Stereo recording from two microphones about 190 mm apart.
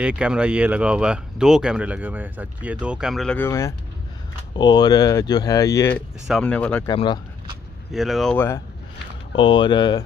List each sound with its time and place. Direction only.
0.0 s speech: 5° right (ahead or behind); by 6.0 s 15° left (ahead or behind)
6.2 s speech: centre (ahead or behind)
6.9 s speech: 25° left (ahead or behind)
7.9 s speech: centre (ahead or behind)
9.3 s speech: 25° left (ahead or behind)